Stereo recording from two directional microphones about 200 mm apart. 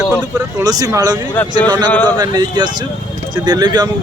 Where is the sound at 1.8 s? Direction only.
10° left (ahead or behind).